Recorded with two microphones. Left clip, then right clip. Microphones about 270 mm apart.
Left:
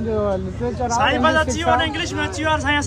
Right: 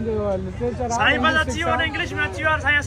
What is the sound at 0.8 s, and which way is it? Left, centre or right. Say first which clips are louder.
Speech: left 2 dB; left.